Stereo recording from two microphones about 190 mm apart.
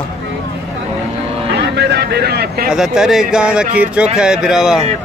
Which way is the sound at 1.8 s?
60° right (ahead or behind).